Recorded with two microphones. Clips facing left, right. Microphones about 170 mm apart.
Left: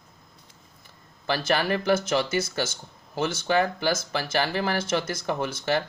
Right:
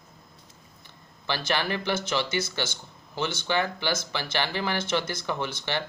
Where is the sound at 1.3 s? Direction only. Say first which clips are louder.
Left 4 dB; 40° left (ahead or behind).